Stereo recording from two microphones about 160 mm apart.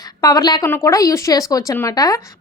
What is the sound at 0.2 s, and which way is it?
A woman's voice, 20° left (ahead or behind).